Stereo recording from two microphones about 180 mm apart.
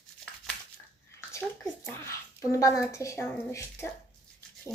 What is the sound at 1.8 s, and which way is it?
Speech, 15° left (ahead or behind).